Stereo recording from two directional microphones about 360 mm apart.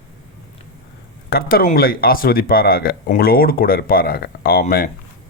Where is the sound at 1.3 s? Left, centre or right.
Left.